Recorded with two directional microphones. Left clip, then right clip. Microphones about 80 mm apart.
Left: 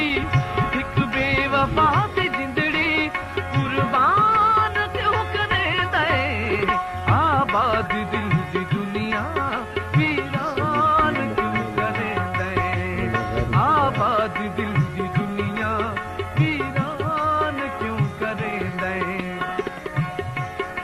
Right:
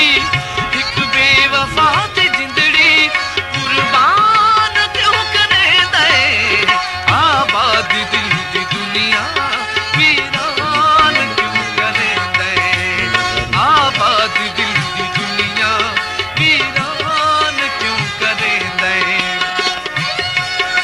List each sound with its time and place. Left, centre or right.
0.9 s music: centre
5.5 s music: right
7.0 s music: centre
13.5 s music: right
17.2 s music: centre
18.8 s music: right